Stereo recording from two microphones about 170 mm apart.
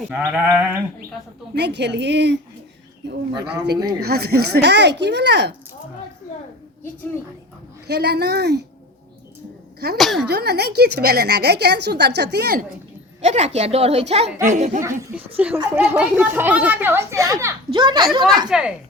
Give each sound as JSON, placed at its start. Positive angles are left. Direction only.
{"t": 0.1, "sound": "speech", "side_deg": -10}
{"t": 1.5, "sound": "a woman's voice", "side_deg": -80}
{"t": 3.5, "sound": "a woman's voice", "side_deg": -75}
{"t": 7.9, "sound": "a woman's voice", "side_deg": -75}
{"t": 10.0, "sound": "speech", "side_deg": 0}
{"t": 10.2, "sound": "a woman's voice", "side_deg": -70}
{"t": 13.2, "sound": "a child's voice", "side_deg": -40}
{"t": 15.4, "sound": "speech", "side_deg": -10}
{"t": 18.4, "sound": "speech", "side_deg": -5}